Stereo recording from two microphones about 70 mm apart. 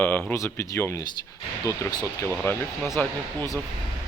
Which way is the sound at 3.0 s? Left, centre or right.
Left.